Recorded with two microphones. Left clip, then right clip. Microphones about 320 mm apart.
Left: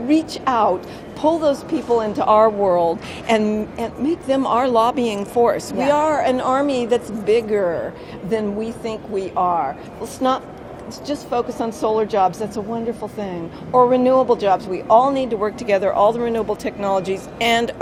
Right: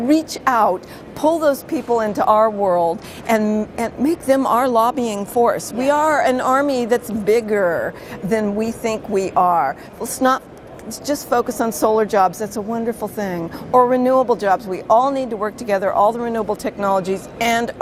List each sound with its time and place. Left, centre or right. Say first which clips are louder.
0.1 s a woman's voice: right 1 dB; right